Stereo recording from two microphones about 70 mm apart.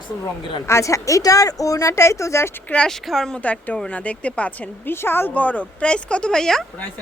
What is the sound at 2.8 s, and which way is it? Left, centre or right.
Speech, centre.